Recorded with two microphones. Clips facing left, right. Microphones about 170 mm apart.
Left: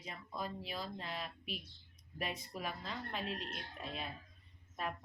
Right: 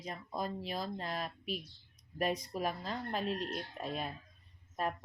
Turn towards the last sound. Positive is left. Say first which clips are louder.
# right 5 dB
turn(degrees=-45)  # may be behind; listen again after turning